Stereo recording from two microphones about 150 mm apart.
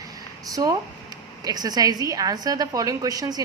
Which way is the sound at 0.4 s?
25° right (ahead or behind).